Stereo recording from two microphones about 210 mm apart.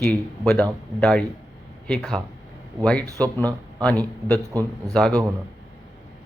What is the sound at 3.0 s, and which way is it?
Speech, 15° right (ahead or behind).